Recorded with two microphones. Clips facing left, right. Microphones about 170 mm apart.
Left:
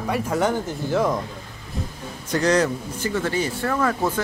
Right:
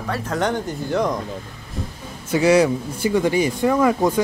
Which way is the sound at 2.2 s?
10° right (ahead or behind).